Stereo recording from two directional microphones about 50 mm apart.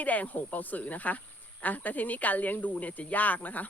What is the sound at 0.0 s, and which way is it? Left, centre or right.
Speech, left.